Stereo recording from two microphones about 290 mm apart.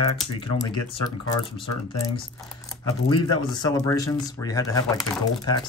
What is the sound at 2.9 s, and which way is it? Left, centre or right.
Speech, centre.